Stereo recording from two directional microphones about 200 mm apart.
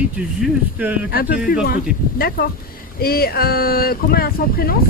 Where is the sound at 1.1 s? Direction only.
45° left (ahead or behind).